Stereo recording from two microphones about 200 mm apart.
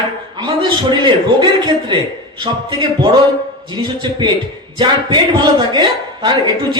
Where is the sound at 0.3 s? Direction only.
20° right (ahead or behind).